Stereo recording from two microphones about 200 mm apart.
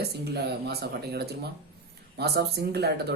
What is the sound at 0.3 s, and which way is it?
Speech, 55° right (ahead or behind).